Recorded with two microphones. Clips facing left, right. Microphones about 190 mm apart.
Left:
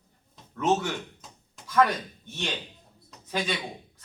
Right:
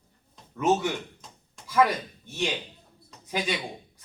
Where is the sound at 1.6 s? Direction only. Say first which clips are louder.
Even; 10° right (ahead or behind).